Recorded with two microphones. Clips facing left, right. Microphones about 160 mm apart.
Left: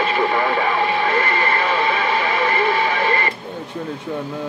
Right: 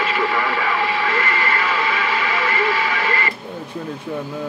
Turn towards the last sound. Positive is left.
turn(degrees=35)  # may be behind; listen again after turning